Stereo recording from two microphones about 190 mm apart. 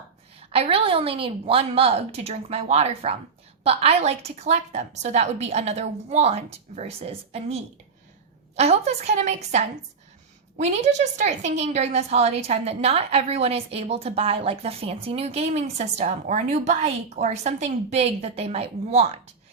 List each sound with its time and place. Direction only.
0.5 s a woman's voice: 30° right (ahead or behind)